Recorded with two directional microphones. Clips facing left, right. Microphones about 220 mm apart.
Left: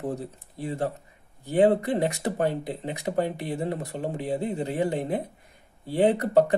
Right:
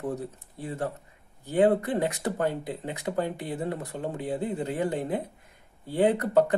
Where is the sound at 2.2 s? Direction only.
20° left (ahead or behind).